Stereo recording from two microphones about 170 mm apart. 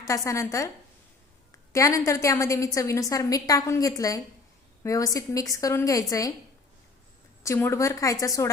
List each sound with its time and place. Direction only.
0.0 s a woman's voice: 20° left (ahead or behind)
1.7 s a woman's voice: 20° left (ahead or behind)
7.4 s a woman's voice: 15° left (ahead or behind)